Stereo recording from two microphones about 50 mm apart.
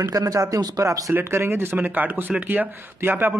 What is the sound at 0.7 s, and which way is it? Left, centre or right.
Speech, right.